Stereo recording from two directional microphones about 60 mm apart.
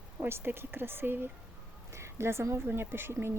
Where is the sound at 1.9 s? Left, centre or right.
Right.